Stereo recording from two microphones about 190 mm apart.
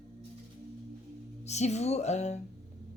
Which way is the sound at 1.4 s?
35° left (ahead or behind).